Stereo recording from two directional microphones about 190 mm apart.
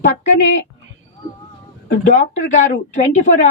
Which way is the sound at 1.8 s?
40° left (ahead or behind).